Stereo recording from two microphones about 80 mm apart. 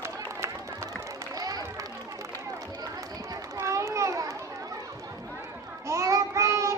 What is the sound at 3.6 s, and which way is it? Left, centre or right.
Children playing, right.